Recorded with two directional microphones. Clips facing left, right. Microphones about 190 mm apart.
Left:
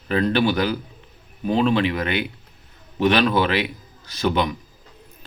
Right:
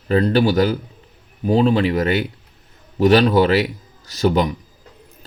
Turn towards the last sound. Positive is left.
turn(degrees=-40)  # may be behind; listen again after turning